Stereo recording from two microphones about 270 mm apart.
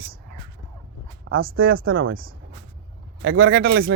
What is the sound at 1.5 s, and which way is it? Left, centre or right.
Speech, right.